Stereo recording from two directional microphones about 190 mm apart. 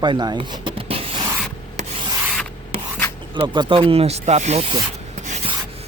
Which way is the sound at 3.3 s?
25° right (ahead or behind).